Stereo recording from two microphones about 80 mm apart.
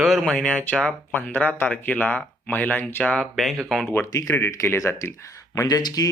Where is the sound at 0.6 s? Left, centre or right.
Centre.